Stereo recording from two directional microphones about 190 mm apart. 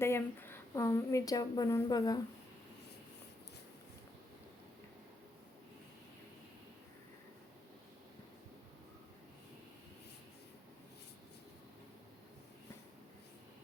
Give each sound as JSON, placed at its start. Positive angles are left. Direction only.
{"t": 0.0, "sound": "a woman's voice", "side_deg": 10}